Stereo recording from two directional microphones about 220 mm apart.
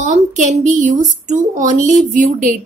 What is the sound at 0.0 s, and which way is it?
Speech, 35° right (ahead or behind).